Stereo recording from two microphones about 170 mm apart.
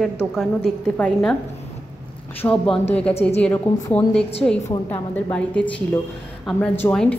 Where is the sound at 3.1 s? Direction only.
35° left (ahead or behind).